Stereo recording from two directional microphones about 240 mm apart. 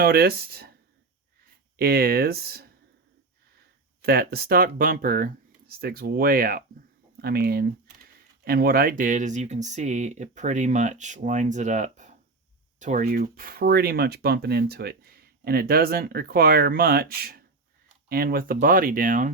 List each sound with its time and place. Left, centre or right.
0.0 s speech: right
1.7 s speech: right
4.0 s speech: right